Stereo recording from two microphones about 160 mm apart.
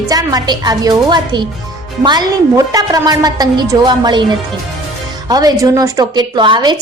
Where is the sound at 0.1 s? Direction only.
25° right (ahead or behind).